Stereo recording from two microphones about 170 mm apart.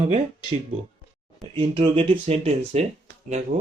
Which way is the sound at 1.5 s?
30° right (ahead or behind).